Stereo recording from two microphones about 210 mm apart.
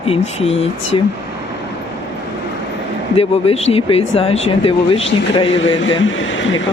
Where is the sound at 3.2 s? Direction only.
30° left (ahead or behind).